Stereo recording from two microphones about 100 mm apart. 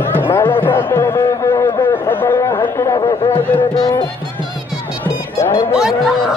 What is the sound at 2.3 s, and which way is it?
Music, 35° left (ahead or behind).